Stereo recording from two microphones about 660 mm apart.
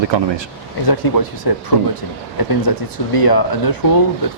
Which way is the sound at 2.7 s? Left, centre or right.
Left.